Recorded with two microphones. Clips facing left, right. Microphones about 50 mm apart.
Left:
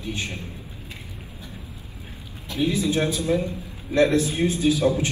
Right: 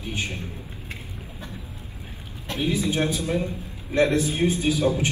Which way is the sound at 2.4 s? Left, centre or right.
Right.